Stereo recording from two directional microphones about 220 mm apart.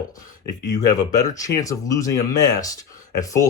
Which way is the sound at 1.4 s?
15° left (ahead or behind).